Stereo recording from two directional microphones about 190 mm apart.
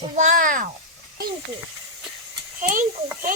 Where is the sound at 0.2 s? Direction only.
45° right (ahead or behind).